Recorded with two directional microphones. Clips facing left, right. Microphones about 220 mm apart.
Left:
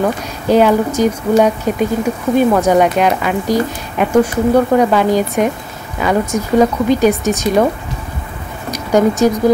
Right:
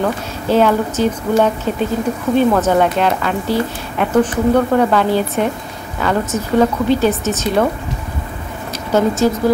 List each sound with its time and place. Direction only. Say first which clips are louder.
0.5 s speech: left 3 dB; 15° left (ahead or behind)
8.9 s speech: left 3 dB; 15° left (ahead or behind)